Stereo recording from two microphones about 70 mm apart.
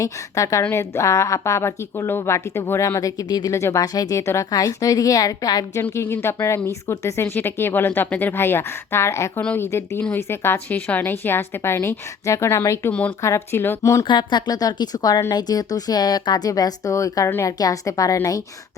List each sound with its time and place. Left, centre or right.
0.0 s a woman's voice: left
2.8 s a woman's voice: left
3.5 s a woman's voice: left
5.9 s speech: left
10.7 s speech: left
12.9 s speech: centre
13.2 s a woman's voice: left
14.2 s a woman's voice: left